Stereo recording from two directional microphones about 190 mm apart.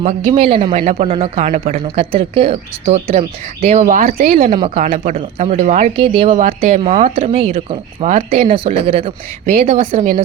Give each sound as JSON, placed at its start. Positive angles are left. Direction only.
{"t": 0.0, "sound": "speech", "side_deg": -30}
{"t": 2.8, "sound": "speech", "side_deg": -50}
{"t": 3.2, "sound": "speech", "side_deg": -35}
{"t": 4.5, "sound": "speech", "side_deg": -25}
{"t": 4.8, "sound": "speech", "side_deg": -40}
{"t": 8.4, "sound": "speech", "side_deg": -30}
{"t": 9.8, "sound": "speech", "side_deg": -45}